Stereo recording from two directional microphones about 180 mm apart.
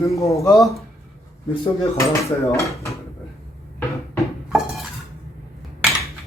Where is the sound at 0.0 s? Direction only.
15° left (ahead or behind).